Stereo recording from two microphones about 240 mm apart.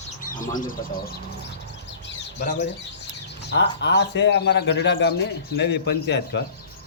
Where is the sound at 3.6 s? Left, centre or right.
Left.